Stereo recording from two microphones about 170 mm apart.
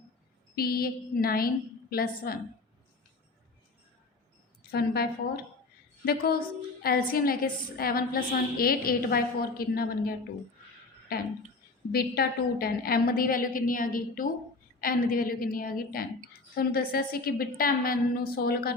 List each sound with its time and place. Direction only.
0.5 s a woman's voice: 60° left (ahead or behind)
4.7 s a woman's voice: 65° left (ahead or behind)
6.1 s a woman's voice: 65° left (ahead or behind)
11.1 s a woman's voice: 65° left (ahead or behind)